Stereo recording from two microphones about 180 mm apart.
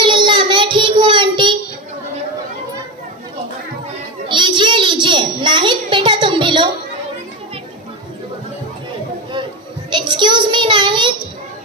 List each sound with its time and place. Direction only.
0.0 s child singing: 25° right (ahead or behind)
4.3 s a sound: 25° right (ahead or behind)
9.8 s child singing: 25° right (ahead or behind)